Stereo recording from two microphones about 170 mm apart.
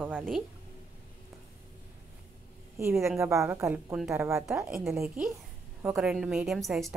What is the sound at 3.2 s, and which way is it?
A woman's voice, 15° right (ahead or behind).